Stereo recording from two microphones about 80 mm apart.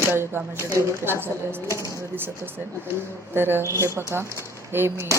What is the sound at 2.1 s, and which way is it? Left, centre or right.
Speech, right.